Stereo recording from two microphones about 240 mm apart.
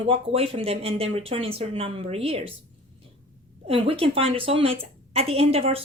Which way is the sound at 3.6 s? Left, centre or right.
Right.